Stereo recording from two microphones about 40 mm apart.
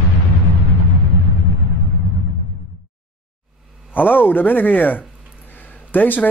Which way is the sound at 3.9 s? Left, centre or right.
Left.